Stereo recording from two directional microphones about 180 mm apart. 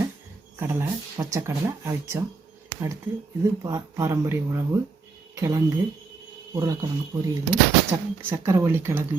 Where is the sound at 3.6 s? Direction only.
15° right (ahead or behind).